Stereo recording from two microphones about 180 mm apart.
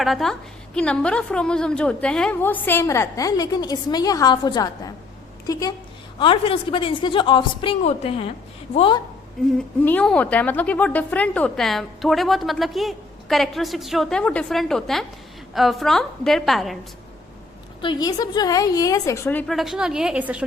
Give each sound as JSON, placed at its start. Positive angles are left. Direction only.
{"t": 0.0, "sound": "a woman's voice", "side_deg": 0}
{"t": 9.4, "sound": "a woman's voice", "side_deg": 0}
{"t": 17.7, "sound": "a woman's voice", "side_deg": 25}